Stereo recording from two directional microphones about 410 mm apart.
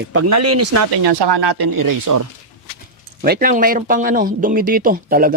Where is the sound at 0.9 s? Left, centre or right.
Right.